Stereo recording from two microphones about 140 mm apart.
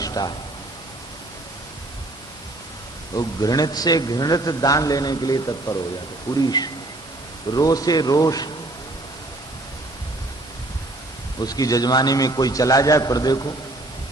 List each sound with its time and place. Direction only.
0.0 s a sound: 25° left (ahead or behind)
3.2 s a man's voice: 25° left (ahead or behind)
11.3 s a man's voice: 25° left (ahead or behind)